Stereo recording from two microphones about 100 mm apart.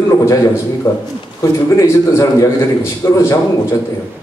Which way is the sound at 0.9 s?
45° left (ahead or behind).